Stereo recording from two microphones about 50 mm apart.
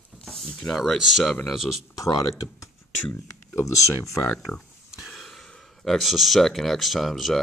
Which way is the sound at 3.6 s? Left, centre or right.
Left.